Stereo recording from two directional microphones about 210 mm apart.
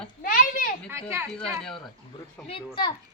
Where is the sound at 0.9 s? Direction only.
10° right (ahead or behind).